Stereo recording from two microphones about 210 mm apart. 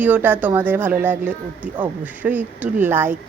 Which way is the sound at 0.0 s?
10° right (ahead or behind).